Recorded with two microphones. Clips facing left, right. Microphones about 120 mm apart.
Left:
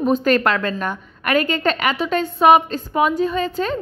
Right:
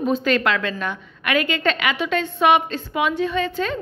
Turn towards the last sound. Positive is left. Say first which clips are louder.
# left 2 dB
turn(degrees=40)  # may be behind; listen again after turning